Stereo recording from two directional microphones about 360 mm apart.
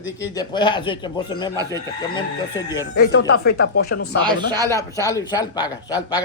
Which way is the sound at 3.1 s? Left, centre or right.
Left.